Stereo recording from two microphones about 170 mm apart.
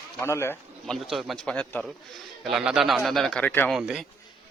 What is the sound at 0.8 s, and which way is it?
A man's voice, centre (ahead or behind).